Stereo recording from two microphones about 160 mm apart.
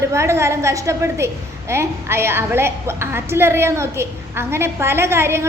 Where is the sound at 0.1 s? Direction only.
15° right (ahead or behind).